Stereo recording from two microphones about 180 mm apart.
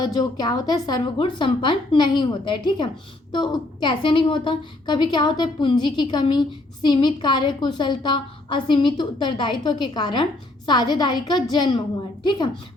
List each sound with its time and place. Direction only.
0.0 s a woman's voice: 20° left (ahead or behind)